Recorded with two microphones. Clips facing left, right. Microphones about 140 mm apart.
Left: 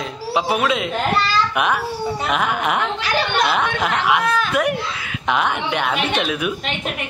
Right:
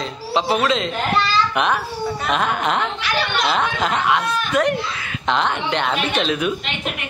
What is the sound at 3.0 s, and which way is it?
Speech, 45° left (ahead or behind).